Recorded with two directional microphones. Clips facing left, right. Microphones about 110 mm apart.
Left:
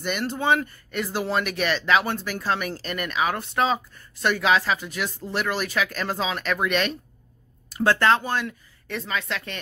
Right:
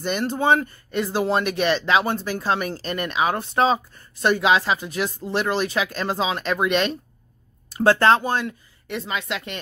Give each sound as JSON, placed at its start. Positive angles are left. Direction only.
{"t": 0.0, "sound": "speech", "side_deg": -30}
{"t": 4.4, "sound": "speech", "side_deg": -20}
{"t": 8.8, "sound": "a woman's voice", "side_deg": -15}